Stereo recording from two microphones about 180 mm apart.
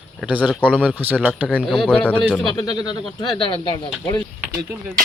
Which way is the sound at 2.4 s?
25° left (ahead or behind).